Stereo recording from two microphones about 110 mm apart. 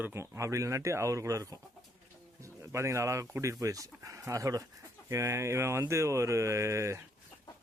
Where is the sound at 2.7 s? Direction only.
25° right (ahead or behind).